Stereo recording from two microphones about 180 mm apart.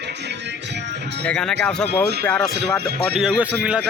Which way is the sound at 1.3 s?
5° left (ahead or behind).